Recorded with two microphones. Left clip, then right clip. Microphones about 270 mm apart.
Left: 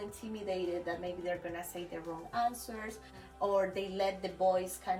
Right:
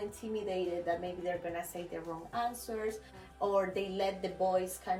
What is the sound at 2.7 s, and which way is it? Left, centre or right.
A woman's voice, centre.